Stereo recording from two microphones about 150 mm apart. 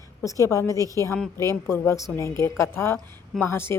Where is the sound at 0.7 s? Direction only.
20° right (ahead or behind).